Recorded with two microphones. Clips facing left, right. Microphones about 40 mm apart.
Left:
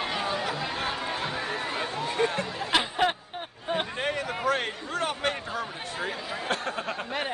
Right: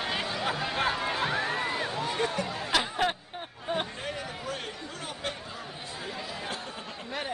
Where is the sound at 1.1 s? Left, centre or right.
Right.